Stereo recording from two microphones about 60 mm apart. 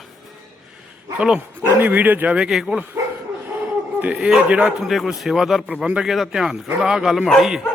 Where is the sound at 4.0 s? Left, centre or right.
Right.